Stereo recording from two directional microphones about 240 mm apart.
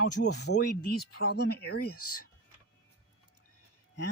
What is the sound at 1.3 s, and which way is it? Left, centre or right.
Speech, left.